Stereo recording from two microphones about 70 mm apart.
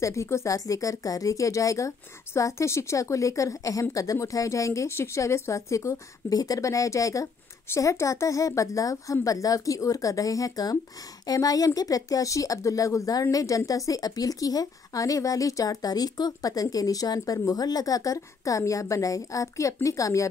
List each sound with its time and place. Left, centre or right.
0.0 s speech: left